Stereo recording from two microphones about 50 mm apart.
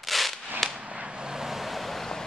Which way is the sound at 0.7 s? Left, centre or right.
Right.